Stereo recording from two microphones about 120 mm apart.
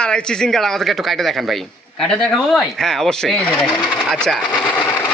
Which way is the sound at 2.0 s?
Centre (ahead or behind).